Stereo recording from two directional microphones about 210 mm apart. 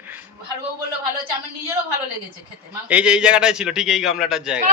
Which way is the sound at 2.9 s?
5° right (ahead or behind).